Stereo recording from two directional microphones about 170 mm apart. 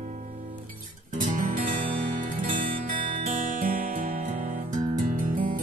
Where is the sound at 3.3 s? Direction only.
55° right (ahead or behind).